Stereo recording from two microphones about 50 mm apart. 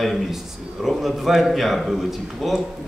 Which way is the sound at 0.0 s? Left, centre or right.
Centre.